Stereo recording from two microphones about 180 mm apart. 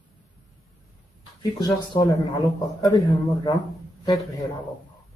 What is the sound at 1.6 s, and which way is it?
A man's voice, 20° left (ahead or behind).